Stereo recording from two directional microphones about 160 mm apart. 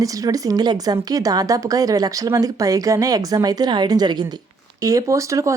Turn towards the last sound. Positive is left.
turn(degrees=-20)  # may be behind; listen again after turning